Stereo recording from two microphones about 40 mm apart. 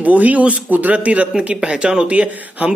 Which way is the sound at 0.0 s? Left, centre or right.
Right.